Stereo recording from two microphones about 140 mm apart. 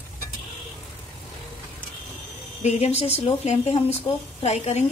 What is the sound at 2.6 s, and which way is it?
A woman's voice, 50° left (ahead or behind).